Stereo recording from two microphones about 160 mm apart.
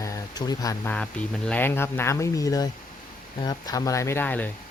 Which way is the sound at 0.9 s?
10° left (ahead or behind).